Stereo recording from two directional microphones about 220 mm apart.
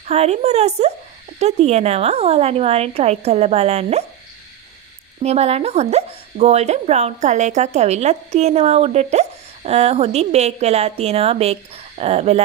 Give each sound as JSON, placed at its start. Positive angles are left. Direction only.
{"t": 0.1, "sound": "speech", "side_deg": -30}
{"t": 5.2, "sound": "speech", "side_deg": -30}